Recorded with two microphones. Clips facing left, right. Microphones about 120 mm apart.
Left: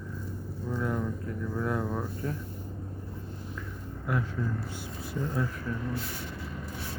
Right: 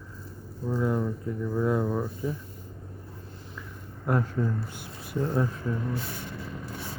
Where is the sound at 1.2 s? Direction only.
15° right (ahead or behind).